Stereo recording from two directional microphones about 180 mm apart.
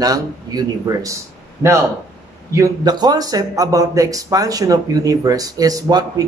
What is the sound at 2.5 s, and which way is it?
Speech, 20° right (ahead or behind).